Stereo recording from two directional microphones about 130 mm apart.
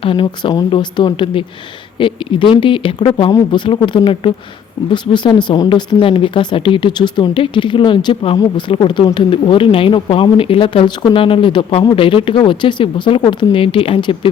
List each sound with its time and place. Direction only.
0.0 s speech: 40° left (ahead or behind)